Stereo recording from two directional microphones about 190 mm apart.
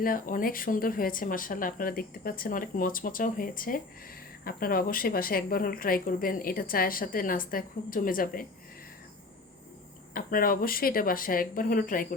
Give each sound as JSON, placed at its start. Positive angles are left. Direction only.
{"t": 0.0, "sound": "a woman's voice", "side_deg": 45}
{"t": 10.2, "sound": "a woman's voice", "side_deg": 50}